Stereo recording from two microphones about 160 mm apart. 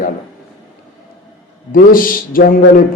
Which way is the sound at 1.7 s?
60° left (ahead or behind).